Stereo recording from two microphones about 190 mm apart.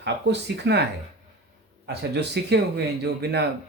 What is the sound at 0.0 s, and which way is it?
Speech, 65° right (ahead or behind).